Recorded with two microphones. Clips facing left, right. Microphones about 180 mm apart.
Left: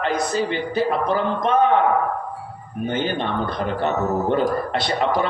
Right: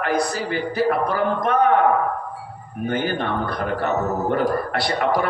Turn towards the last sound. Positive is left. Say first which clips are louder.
# even
turn(degrees=25)  # may be behind; listen again after turning